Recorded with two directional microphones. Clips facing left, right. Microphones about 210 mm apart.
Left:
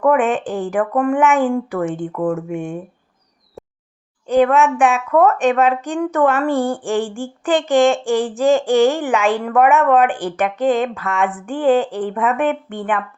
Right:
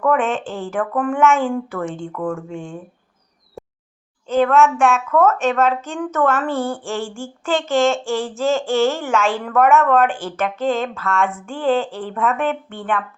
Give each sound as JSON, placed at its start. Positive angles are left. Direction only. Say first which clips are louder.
{"t": 0.2, "sound": "child singing", "louder": "left 4 dB", "side_deg": 15}
{"t": 1.7, "sound": "speech", "louder": "left 5 dB", "side_deg": 5}
{"t": 2.1, "sound": "speech", "louder": "left 5 dB", "side_deg": 20}
{"t": 3.6, "sound": "a sound", "louder": "right 1 dB", "side_deg": 0}
{"t": 4.3, "sound": "child singing", "louder": "left 1 dB", "side_deg": 15}